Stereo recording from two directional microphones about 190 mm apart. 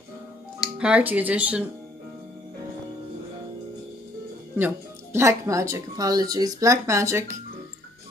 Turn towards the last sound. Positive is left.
turn(degrees=-15)  # may be behind; listen again after turning